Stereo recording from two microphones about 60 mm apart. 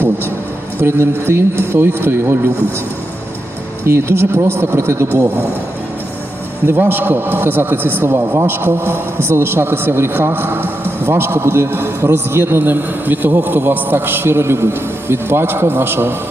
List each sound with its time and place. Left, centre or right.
0.8 s a man's voice: right
3.8 s speech: right
6.7 s a man's voice: right